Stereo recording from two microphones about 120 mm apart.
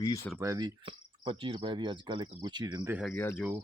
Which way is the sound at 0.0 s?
30° left (ahead or behind).